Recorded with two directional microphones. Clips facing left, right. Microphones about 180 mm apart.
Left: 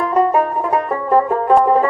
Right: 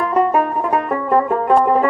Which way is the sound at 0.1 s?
20° left (ahead or behind).